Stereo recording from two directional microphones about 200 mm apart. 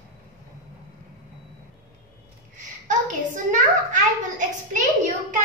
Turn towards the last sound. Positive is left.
turn(degrees=-40)  # may be behind; listen again after turning